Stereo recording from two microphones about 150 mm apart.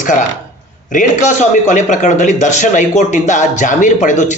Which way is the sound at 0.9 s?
55° left (ahead or behind).